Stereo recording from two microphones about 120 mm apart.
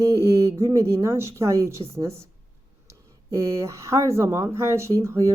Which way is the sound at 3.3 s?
25° right (ahead or behind).